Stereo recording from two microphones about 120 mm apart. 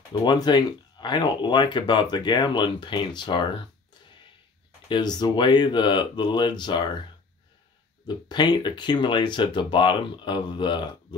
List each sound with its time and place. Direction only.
0.1 s speech: 35° left (ahead or behind)
4.8 s speech: 40° left (ahead or behind)
8.3 s speech: 40° left (ahead or behind)